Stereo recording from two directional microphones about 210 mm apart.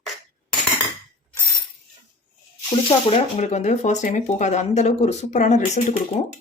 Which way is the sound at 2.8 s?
30° left (ahead or behind).